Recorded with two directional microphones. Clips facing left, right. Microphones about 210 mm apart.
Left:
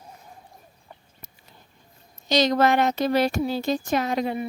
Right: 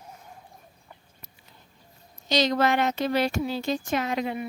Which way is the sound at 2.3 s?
45° left (ahead or behind).